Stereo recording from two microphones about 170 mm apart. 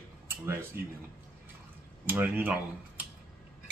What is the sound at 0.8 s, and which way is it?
Speech, 65° right (ahead or behind).